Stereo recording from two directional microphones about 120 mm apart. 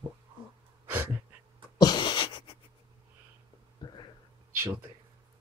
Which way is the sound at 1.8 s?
40° left (ahead or behind).